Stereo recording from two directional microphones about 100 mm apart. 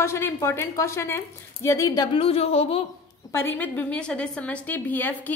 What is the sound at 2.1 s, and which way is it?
Speech, 80° left.